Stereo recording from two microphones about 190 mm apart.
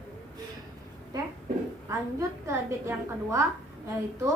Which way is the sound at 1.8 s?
15° right (ahead or behind).